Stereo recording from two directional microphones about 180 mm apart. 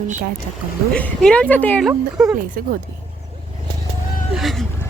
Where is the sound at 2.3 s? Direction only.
50° right (ahead or behind).